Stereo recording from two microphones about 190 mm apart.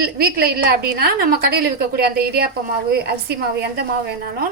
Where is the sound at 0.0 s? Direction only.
55° right (ahead or behind).